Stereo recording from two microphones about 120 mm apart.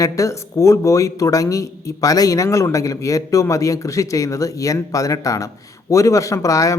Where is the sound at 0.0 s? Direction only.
25° left (ahead or behind).